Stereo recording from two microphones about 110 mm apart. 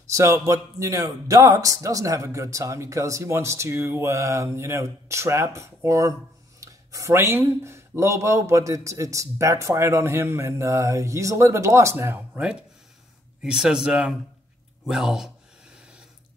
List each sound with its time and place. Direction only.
0.0 s speech: 25° right (ahead or behind)
12.4 s speech: 10° right (ahead or behind)
14.9 s a sound: 5° right (ahead or behind)